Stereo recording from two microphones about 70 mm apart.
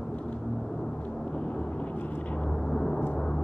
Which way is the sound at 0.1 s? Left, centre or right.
Centre.